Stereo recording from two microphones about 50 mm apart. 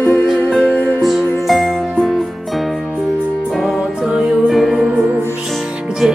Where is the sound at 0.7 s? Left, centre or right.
Centre.